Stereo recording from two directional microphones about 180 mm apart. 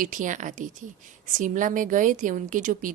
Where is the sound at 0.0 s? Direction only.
45° right (ahead or behind).